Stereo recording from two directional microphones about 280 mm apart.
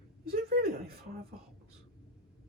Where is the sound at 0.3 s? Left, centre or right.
Right.